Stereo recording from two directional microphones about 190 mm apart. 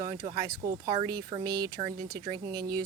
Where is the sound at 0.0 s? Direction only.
20° right (ahead or behind).